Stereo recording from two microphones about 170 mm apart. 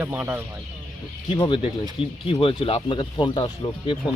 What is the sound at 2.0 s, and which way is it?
Speech, 30° left (ahead or behind).